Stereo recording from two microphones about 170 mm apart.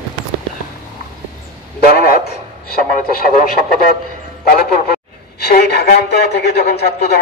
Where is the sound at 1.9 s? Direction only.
65° left (ahead or behind).